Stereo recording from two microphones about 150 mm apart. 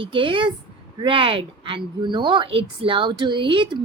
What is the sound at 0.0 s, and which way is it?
A woman's voice, 35° right (ahead or behind).